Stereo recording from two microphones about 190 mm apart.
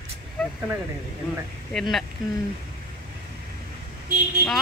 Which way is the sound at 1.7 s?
Centre (ahead or behind).